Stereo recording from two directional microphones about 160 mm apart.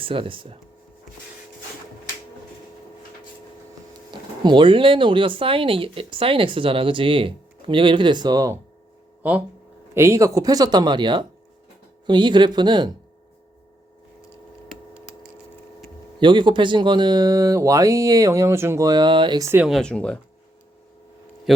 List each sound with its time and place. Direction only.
0.0 s speech: 35° right (ahead or behind)
4.1 s speech: 30° right (ahead or behind)
9.2 s speech: 10° right (ahead or behind); by 12.9 s 30° right (ahead or behind)
16.2 s speech: 30° right (ahead or behind)
19.6 s speech: 5° left (ahead or behind)